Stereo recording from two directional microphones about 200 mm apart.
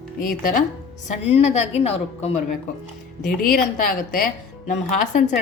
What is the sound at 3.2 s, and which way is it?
A woman's voice, 45° left (ahead or behind).